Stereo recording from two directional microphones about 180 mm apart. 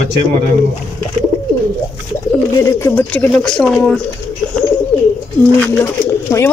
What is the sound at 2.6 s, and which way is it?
Speech, 15° left (ahead or behind).